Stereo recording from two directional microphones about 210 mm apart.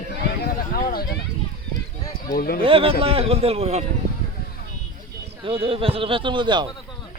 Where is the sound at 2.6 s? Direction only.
25° right (ahead or behind).